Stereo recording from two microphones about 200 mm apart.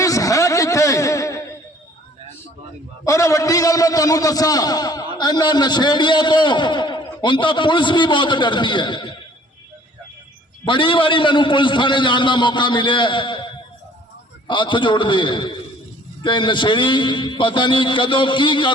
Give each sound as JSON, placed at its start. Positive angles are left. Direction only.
{"t": 0.0, "sound": "a sound", "side_deg": 15}
{"t": 3.0, "sound": "a man's voice", "side_deg": 15}
{"t": 10.7, "sound": "a man's voice", "side_deg": 25}